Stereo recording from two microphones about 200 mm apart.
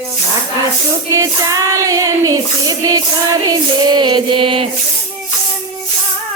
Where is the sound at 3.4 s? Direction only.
20° right (ahead or behind).